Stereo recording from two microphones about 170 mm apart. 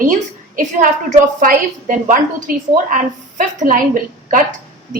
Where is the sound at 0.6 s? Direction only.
50° right (ahead or behind).